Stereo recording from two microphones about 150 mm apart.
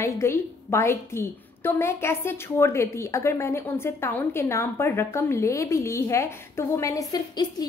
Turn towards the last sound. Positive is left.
turn(degrees=25)  # may be behind; listen again after turning